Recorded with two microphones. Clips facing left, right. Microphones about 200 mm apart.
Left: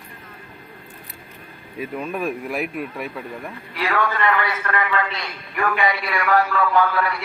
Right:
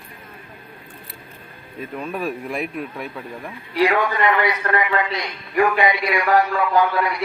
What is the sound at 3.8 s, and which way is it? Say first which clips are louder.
A man's voice: right 4 dB; 15° right (ahead or behind).